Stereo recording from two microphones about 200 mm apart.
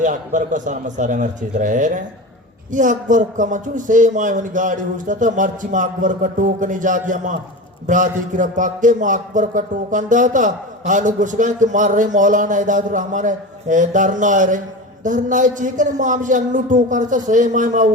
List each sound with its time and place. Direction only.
0.0 s a man's voice: 40° right (ahead or behind)